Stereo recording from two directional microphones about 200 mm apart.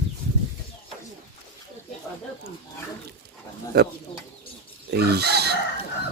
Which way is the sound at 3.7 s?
55° right (ahead or behind).